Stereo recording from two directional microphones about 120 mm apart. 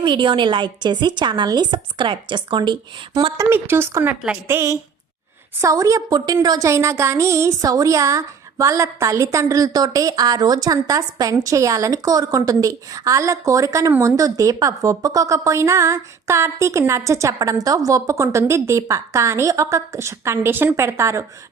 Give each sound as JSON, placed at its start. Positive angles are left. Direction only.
{"t": 0.0, "sound": "a woman's voice", "side_deg": -45}
{"t": 3.3, "sound": "a woman's voice", "side_deg": -20}
{"t": 4.1, "sound": "a woman's voice", "side_deg": -5}
{"t": 4.4, "sound": "a woman's voice", "side_deg": -25}